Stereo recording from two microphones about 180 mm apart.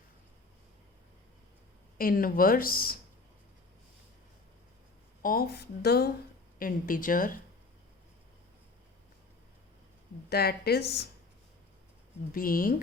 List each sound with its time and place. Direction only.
2.0 s speech: 50° left (ahead or behind)
5.2 s speech: 55° left (ahead or behind)
6.6 s speech: 50° left (ahead or behind)
10.2 s speech: 60° left (ahead or behind)
12.3 s speech: 50° left (ahead or behind)